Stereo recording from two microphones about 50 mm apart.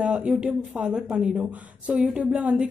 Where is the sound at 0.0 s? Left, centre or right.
Right.